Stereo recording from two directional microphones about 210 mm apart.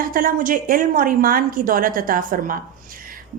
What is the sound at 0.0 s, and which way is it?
A woman's voice, 40° right (ahead or behind).